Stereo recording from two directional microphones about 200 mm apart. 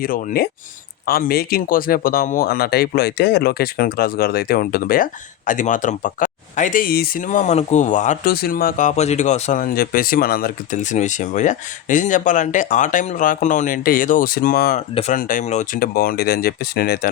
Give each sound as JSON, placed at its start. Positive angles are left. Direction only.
{"t": 0.0, "sound": "speech", "side_deg": 45}
{"t": 14.8, "sound": "speech", "side_deg": 35}